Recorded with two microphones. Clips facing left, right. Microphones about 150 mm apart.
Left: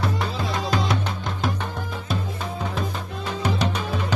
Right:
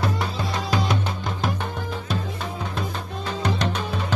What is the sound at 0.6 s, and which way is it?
Music, centre (ahead or behind).